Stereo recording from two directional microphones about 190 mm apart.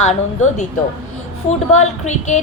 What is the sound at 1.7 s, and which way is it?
Speech, 40° left (ahead or behind).